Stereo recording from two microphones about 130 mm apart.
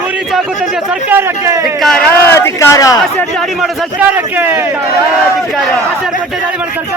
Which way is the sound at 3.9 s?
15° right (ahead or behind).